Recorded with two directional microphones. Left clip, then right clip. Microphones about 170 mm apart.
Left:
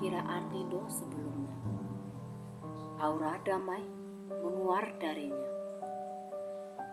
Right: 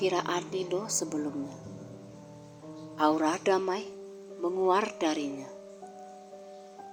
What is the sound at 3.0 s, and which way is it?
Speech, 35° right (ahead or behind).